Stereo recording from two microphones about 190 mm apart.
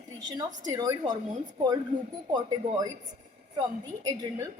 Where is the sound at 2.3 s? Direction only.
20° right (ahead or behind).